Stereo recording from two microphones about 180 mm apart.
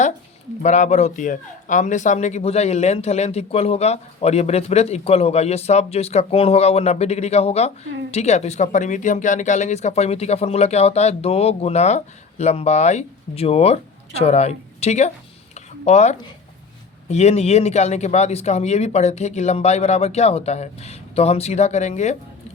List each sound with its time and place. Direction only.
0.6 s a man's voice: 40° left (ahead or behind)
15.5 s a sound: 40° left (ahead or behind)
17.1 s a man's voice: 40° left (ahead or behind)